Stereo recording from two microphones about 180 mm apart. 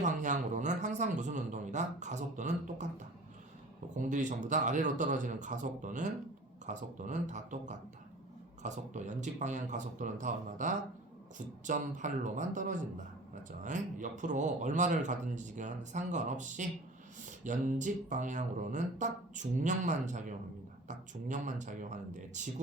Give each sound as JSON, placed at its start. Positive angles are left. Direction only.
{"t": 0.0, "sound": "speech", "side_deg": -45}
{"t": 3.9, "sound": "speech", "side_deg": -45}